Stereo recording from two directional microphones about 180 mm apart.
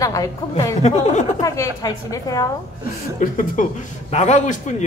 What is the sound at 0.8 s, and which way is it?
Speech, 40° left (ahead or behind).